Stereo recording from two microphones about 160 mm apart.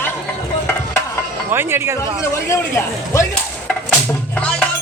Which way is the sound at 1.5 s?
15° right (ahead or behind).